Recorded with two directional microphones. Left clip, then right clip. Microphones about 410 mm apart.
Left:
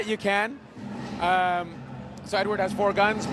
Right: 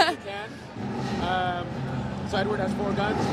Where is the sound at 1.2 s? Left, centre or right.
Left.